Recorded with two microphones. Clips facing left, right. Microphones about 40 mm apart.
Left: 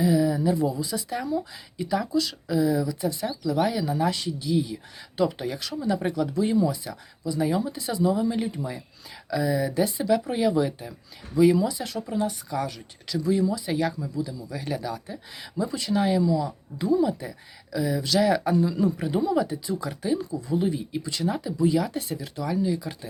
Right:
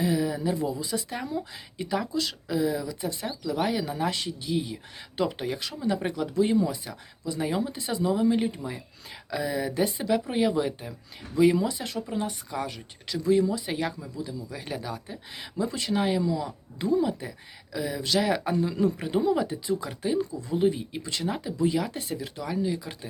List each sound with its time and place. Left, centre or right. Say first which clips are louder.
0.0 s speech: left 4 dB; right
11.3 s speech: left 2 dB; right; by 15.2 s centre
15.3 s speech: left 1 dB; right
16.0 s speech: left 3 dB; right
16.4 s speech: left 3 dB; right
18.5 s speech: left 2 dB; right